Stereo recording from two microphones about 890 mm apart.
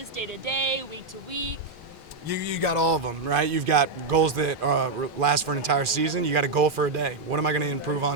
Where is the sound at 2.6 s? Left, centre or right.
Right.